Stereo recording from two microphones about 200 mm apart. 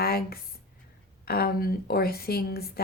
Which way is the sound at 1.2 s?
50° left (ahead or behind).